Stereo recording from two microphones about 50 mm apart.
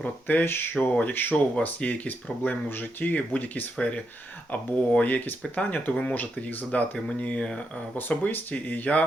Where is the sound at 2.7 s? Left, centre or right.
Left.